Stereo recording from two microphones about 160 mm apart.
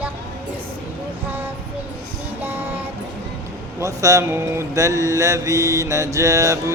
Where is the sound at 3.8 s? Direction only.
20° right (ahead or behind).